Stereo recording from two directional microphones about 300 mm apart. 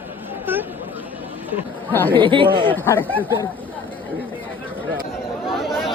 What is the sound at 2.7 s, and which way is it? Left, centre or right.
Speech, centre.